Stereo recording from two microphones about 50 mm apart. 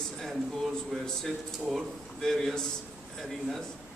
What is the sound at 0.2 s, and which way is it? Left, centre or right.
A man's voice, centre.